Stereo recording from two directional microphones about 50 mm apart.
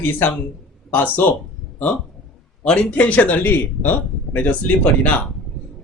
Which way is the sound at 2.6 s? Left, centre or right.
Centre.